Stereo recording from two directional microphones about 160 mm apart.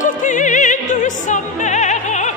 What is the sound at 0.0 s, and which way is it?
Opera, 50° left (ahead or behind).